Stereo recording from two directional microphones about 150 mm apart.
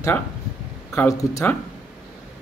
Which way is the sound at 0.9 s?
20° left (ahead or behind).